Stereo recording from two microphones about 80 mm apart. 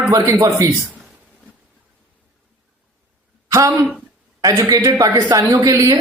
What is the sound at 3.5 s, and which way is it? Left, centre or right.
Speech, right.